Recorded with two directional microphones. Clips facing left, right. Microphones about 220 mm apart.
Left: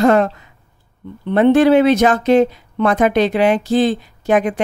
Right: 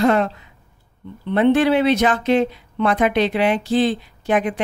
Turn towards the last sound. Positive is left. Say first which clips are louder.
# left 4 dB
turn(degrees=45)  # may be behind; listen again after turning